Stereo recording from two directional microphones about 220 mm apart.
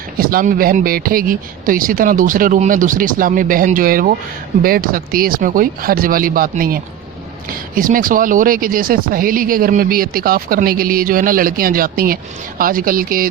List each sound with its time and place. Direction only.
0.2 s speech: 40° right (ahead or behind)